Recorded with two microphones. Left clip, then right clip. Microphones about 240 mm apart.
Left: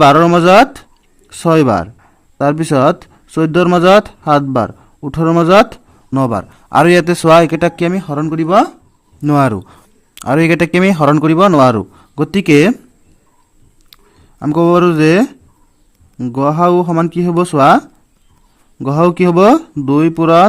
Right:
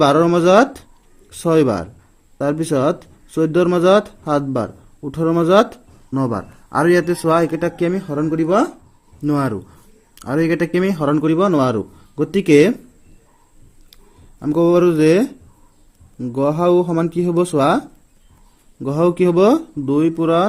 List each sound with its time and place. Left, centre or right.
0.0 s a man's voice: left
13.9 s a sound: left
14.8 s speech: left